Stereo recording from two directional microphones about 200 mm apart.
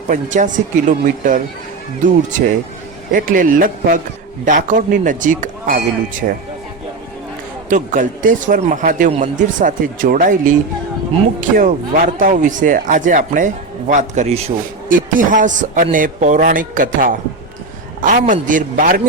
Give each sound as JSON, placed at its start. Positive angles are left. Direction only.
{"t": 0.1, "sound": "a man's voice", "side_deg": -40}
{"t": 7.7, "sound": "a man's voice", "side_deg": -40}